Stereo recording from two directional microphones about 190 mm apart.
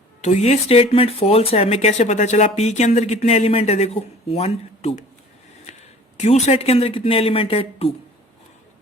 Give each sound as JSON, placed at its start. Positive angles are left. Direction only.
{"t": 0.2, "sound": "speech", "side_deg": 35}
{"t": 6.1, "sound": "speech", "side_deg": 35}